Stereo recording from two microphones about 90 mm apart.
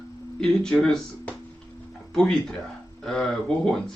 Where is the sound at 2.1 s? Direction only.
5° left (ahead or behind).